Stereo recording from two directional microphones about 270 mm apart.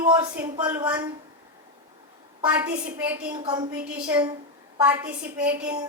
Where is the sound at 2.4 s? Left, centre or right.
Centre.